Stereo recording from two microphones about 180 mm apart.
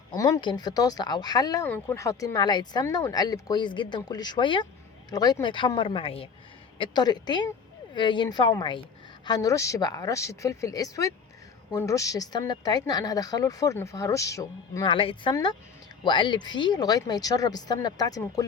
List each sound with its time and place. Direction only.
0.1 s speech: 20° left (ahead or behind)
1.6 s speech: 10° left (ahead or behind)